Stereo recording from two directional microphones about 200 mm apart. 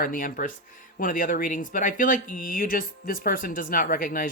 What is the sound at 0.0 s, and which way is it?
Speech, 45° left (ahead or behind).